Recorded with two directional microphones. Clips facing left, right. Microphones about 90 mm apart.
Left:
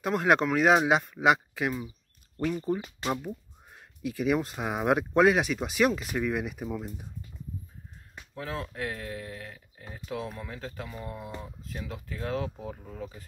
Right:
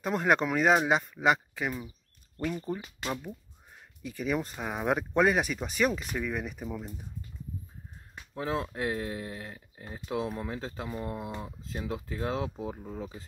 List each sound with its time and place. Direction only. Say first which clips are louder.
0.0 s speech: left 2 dB; centre (ahead or behind)
8.4 s speech: right 3 dB; 25° right (ahead or behind)